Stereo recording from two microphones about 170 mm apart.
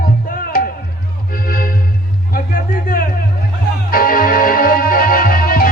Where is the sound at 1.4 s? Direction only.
60° left (ahead or behind).